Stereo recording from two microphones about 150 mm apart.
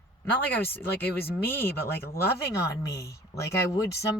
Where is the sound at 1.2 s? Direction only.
15° left (ahead or behind).